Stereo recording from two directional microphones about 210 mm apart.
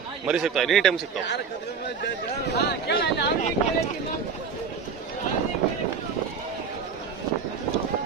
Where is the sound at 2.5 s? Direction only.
45° left (ahead or behind).